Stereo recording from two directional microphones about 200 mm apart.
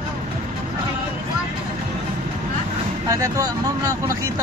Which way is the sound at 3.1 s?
15° right (ahead or behind).